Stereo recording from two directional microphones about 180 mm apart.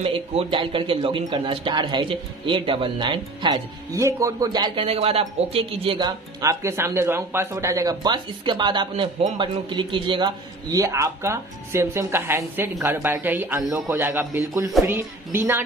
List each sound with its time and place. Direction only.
0.0 s a man's voice: 35° right (ahead or behind); by 15.6 s 10° right (ahead or behind)